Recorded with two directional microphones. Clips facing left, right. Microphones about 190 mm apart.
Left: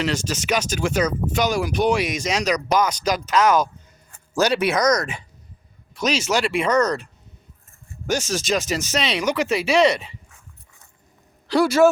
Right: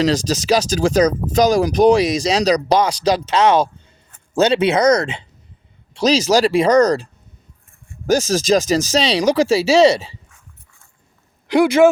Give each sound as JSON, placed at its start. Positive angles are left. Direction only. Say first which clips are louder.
{"t": 0.0, "sound": "speech", "louder": "right 7 dB", "side_deg": -35}
{"t": 11.4, "sound": "speech", "louder": "right 4 dB", "side_deg": -15}